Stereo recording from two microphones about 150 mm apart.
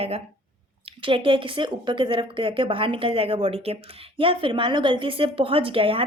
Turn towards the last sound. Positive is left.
turn(degrees=-35)  # may be behind; listen again after turning